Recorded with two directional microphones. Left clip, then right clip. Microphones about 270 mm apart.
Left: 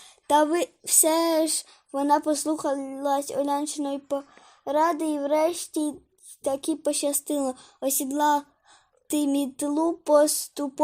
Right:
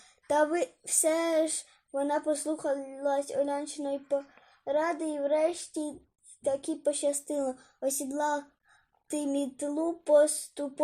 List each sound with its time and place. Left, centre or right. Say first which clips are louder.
0.3 s speech: left 6 dB; left